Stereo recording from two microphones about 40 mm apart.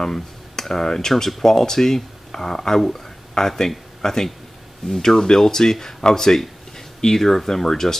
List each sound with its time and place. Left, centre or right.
0.0 s speech: centre